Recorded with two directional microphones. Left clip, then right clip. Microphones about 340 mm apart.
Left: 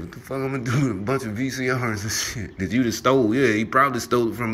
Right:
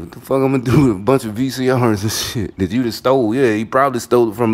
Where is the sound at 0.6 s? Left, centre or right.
Right.